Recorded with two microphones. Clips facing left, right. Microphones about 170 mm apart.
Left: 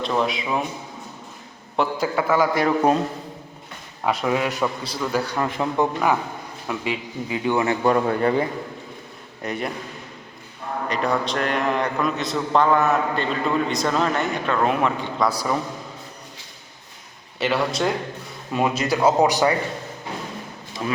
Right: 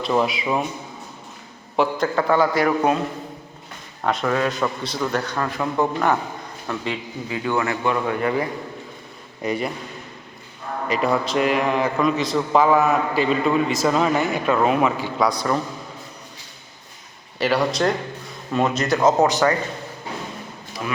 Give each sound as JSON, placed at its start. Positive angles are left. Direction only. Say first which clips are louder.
{"t": 0.0, "sound": "a man's voice", "louder": "right 2 dB", "side_deg": -5}
{"t": 1.7, "sound": "speech", "louder": "right 2 dB", "side_deg": 5}
{"t": 2.6, "sound": "a man's voice", "louder": "even", "side_deg": 25}
{"t": 4.0, "sound": "speech", "louder": "right 1 dB", "side_deg": 5}
{"t": 5.4, "sound": "a man's voice", "louder": "even", "side_deg": 20}
{"t": 7.9, "sound": "a man's voice", "louder": "left 4 dB", "side_deg": 35}
{"t": 9.4, "sound": "a man's voice", "louder": "right 3 dB", "side_deg": 0}
{"t": 10.8, "sound": "a man's voice", "louder": "right 2 dB", "side_deg": -5}
{"t": 15.3, "sound": "speech", "louder": "right 2 dB", "side_deg": 5}
{"t": 17.3, "sound": "a man's voice", "louder": "right 2 dB", "side_deg": 0}